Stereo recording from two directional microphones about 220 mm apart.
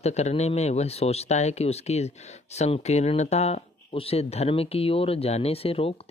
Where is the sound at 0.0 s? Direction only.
30° left (ahead or behind).